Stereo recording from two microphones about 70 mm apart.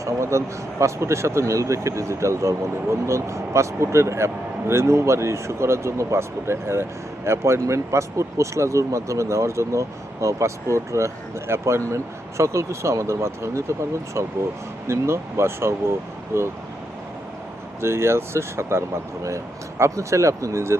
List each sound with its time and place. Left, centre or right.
0.0 s speech: right
17.7 s speech: right
19.8 s speech: right